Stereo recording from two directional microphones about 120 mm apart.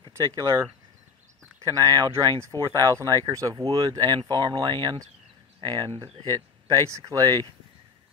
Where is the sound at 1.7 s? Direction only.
35° right (ahead or behind).